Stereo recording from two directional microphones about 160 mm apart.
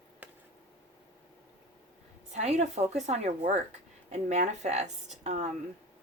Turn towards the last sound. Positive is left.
turn(degrees=-45)  # may be behind; listen again after turning